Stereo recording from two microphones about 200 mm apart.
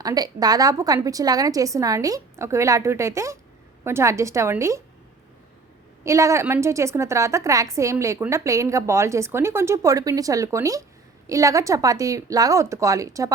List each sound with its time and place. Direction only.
0.0 s a woman's voice: 20° right (ahead or behind)
6.1 s a woman's voice: 15° right (ahead or behind)